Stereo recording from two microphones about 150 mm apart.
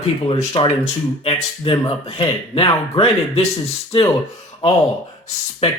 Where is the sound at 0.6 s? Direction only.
35° left (ahead or behind).